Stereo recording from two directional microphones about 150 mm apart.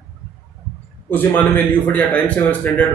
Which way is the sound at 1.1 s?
10° left (ahead or behind).